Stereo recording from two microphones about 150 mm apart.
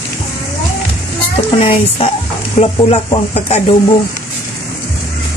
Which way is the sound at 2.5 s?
40° left (ahead or behind).